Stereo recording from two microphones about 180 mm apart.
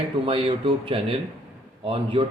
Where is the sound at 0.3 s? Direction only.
30° right (ahead or behind).